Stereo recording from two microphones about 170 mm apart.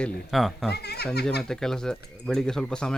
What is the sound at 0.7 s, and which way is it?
Speech, 70° left (ahead or behind).